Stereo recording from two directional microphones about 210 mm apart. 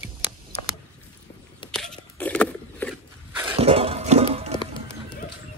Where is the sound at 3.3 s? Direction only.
25° right (ahead or behind).